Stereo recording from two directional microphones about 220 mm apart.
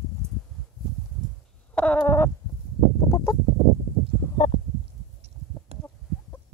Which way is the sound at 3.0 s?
15° left (ahead or behind).